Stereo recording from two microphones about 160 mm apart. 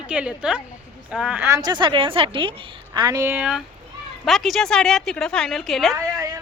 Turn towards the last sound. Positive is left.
turn(degrees=-20)  # may be behind; listen again after turning